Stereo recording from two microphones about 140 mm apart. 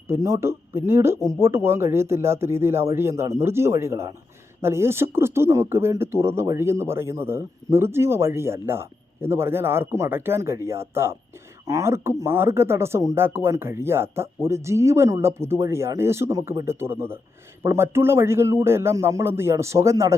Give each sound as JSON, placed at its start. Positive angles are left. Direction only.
{"t": 0.1, "sound": "a man's voice", "side_deg": -20}